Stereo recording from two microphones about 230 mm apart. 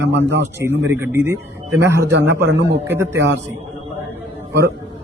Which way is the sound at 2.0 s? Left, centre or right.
Right.